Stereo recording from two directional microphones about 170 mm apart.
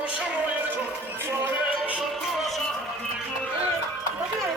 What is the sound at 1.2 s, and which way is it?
Music, 10° right (ahead or behind).